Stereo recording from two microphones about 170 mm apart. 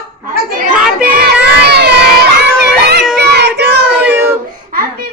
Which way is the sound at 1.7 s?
75° right (ahead or behind).